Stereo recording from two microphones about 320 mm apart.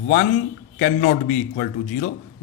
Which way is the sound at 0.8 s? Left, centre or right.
Left.